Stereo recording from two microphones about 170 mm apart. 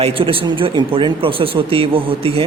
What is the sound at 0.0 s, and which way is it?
Speech, 30° right (ahead or behind).